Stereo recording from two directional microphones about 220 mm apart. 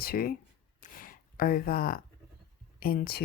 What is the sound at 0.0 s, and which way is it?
Speech, 45° left (ahead or behind).